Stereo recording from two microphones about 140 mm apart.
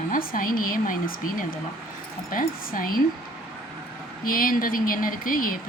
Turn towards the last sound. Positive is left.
turn(degrees=80)